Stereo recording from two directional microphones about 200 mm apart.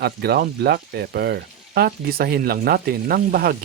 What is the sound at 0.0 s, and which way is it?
Speech, 55° right (ahead or behind).